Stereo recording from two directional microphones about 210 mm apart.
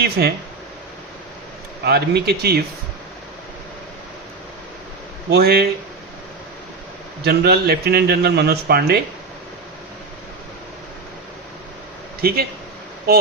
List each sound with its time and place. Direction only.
0.0 s speech: 50° right (ahead or behind)
1.8 s speech: 50° right (ahead or behind)
5.3 s speech: 50° right (ahead or behind)
7.3 s speech: 50° right (ahead or behind)
12.2 s speech: 45° right (ahead or behind)